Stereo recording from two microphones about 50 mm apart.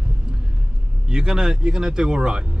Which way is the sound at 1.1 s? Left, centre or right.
Centre.